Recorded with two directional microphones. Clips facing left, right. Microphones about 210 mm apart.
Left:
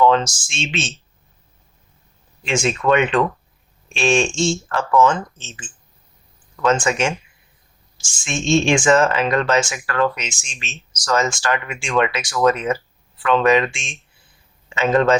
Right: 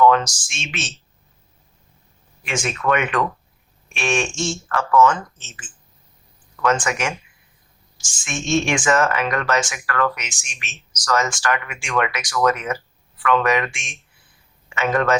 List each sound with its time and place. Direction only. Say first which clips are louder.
0.0 s a sound: even; 25° left (ahead or behind)
0.4 s speech: left 6 dB; 25° left (ahead or behind)
2.4 s speech: left 4 dB; 25° left (ahead or behind)